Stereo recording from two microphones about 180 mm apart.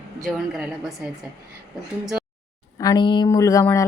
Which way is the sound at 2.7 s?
20° left (ahead or behind).